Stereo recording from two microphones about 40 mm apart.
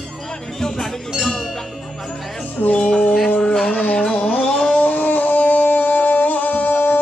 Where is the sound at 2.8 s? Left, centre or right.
Left.